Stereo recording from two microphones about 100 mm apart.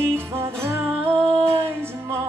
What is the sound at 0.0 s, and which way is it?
Music, 25° right (ahead or behind).